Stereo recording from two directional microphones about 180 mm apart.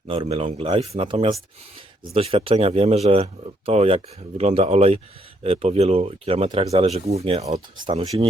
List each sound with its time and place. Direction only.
0.1 s speech: 35° right (ahead or behind)